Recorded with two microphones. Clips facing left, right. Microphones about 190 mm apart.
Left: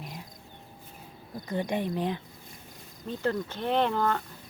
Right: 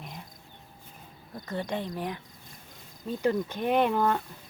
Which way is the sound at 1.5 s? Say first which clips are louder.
Left 3 dB; 15° left (ahead or behind).